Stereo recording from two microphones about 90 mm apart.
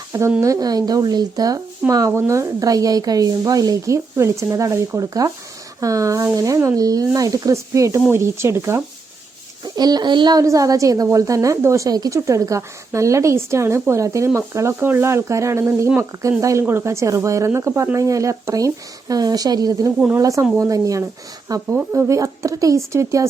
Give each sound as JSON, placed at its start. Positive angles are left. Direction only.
{"t": 0.4, "sound": "a woman's voice", "side_deg": -40}
{"t": 9.6, "sound": "speech", "side_deg": -50}
{"t": 10.3, "sound": "a woman's voice", "side_deg": -40}